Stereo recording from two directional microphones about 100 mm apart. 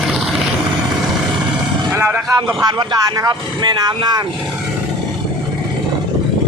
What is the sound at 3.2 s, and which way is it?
Speech, 45° right (ahead or behind).